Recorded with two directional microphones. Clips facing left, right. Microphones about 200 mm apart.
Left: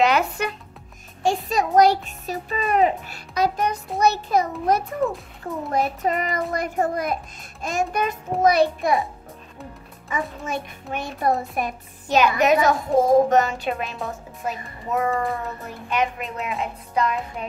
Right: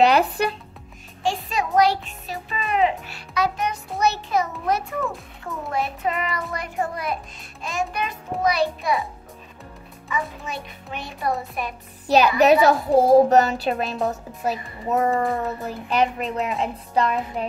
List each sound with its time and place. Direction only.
0.0 s speech: 35° right (ahead or behind)
1.2 s a child's voice: 40° left (ahead or behind)
4.0 s music: 40° left (ahead or behind)
5.7 s a child's voice: 40° left (ahead or behind)
10.1 s a child's voice: 45° left (ahead or behind)
12.1 s a child's voice: 35° right (ahead or behind)